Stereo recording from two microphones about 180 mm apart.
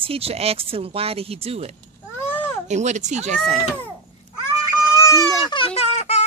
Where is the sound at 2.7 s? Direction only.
40° right (ahead or behind).